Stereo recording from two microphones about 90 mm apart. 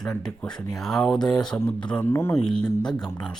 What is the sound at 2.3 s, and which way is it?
Speech, 10° left (ahead or behind).